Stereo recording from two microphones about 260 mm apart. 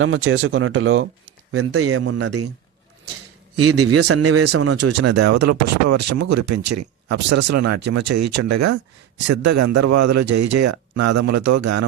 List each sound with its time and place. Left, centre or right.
0.0 s a man's voice: right
3.5 s a man's voice: right
5.5 s speech: right
7.3 s speech: right
7.7 s speech: right
9.3 s speech: right